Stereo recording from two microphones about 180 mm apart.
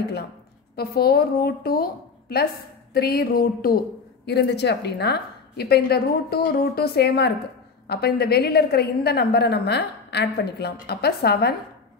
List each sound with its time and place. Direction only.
0.7 s a woman's voice: 60° left (ahead or behind)
4.3 s a woman's voice: 70° left (ahead or behind)